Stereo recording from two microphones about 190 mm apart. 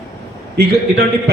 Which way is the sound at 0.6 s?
60° right (ahead or behind).